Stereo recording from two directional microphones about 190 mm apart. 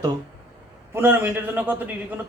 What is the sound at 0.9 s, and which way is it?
Speech, 10° right (ahead or behind).